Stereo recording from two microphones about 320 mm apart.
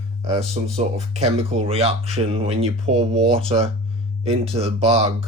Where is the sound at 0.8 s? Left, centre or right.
Right.